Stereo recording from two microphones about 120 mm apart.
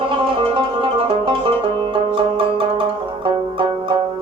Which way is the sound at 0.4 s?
50° right (ahead or behind).